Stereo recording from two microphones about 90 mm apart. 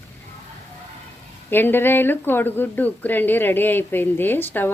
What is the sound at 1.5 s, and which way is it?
Speech, 25° left (ahead or behind).